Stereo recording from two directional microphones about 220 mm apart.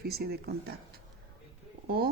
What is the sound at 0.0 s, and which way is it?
Speech, 45° right (ahead or behind).